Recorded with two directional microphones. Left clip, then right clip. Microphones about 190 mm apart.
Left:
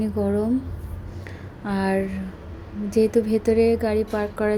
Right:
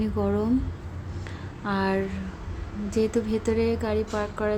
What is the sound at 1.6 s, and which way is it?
A woman's voice, 15° left (ahead or behind).